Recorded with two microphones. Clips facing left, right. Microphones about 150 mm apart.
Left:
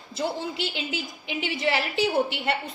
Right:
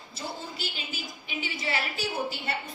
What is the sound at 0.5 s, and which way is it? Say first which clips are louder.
A woman's voice: left 7 dB; 90° left.